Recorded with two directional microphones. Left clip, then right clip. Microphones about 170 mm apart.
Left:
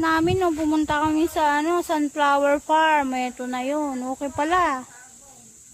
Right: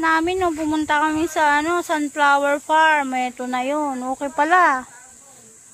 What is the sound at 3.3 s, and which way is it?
Speech, centre (ahead or behind).